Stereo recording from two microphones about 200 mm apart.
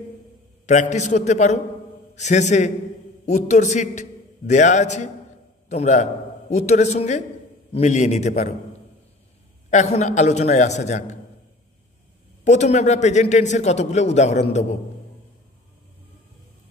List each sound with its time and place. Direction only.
0.7 s a man's voice: 35° left (ahead or behind)
9.7 s a man's voice: 35° left (ahead or behind)
12.4 s a man's voice: 35° left (ahead or behind)